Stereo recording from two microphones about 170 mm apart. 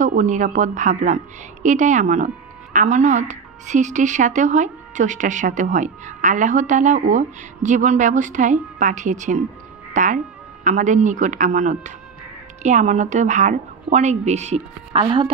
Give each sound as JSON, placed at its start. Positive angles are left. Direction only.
{"t": 0.0, "sound": "a woman's voice", "side_deg": -45}